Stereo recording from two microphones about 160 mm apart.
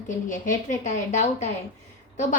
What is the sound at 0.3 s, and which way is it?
A woman's voice, 55° left (ahead or behind).